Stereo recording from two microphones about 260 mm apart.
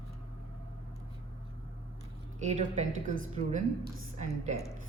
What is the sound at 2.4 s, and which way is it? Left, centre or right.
Speech, right.